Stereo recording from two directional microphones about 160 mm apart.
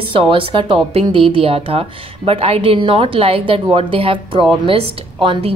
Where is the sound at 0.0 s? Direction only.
35° right (ahead or behind).